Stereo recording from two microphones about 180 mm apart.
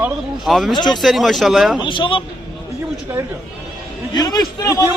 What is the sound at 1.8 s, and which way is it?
Speech, 25° left (ahead or behind).